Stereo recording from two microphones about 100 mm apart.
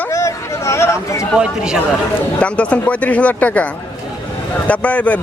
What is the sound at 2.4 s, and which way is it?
A man's voice, 10° left (ahead or behind).